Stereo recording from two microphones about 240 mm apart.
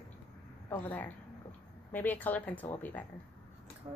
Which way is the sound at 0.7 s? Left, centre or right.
Centre.